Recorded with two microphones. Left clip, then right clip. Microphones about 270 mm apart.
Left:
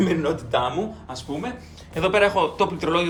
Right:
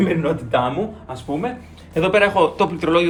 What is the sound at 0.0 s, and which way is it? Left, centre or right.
Speech, centre.